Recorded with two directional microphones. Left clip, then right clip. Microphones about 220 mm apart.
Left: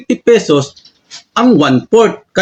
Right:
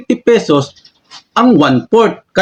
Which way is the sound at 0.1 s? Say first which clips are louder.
Left 1 dB; 5° right (ahead or behind).